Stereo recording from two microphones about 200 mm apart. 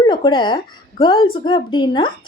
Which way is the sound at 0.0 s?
25° left (ahead or behind).